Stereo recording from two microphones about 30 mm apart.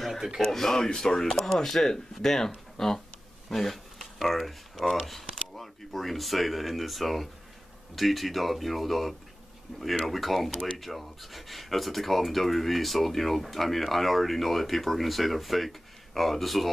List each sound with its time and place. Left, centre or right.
0.4 s speech: centre
3.5 s speech: centre